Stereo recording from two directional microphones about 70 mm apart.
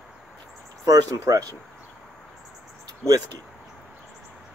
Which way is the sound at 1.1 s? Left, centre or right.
Right.